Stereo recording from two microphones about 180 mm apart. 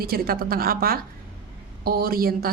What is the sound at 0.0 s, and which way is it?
A woman's voice, 55° right (ahead or behind).